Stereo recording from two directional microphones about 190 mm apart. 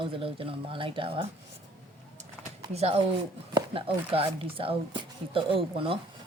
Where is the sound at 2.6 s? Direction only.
35° right (ahead or behind).